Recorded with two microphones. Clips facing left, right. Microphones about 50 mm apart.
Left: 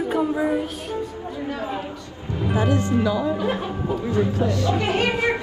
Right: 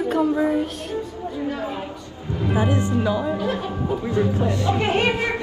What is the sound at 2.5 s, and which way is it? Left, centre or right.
Speech, centre.